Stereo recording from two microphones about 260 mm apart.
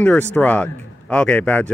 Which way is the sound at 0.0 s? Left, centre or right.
Centre.